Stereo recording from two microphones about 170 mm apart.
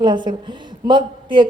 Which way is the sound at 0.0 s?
25° right (ahead or behind).